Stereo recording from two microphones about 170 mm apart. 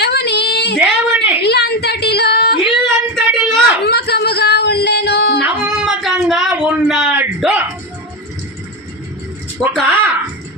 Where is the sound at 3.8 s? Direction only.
70° left (ahead or behind).